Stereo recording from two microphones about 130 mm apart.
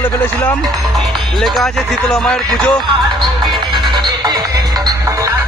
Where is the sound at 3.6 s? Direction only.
35° right (ahead or behind).